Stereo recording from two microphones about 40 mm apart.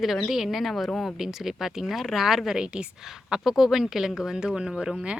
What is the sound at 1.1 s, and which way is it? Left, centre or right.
Speech, centre.